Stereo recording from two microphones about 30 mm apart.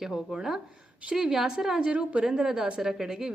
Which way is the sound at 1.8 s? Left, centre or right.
Right.